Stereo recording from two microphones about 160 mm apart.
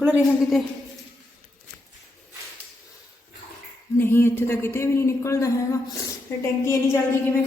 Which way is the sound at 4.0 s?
15° left (ahead or behind).